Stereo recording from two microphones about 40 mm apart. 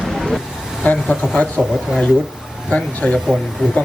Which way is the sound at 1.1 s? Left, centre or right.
Left.